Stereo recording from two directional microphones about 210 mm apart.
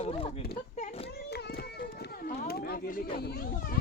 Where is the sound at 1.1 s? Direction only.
50° left (ahead or behind).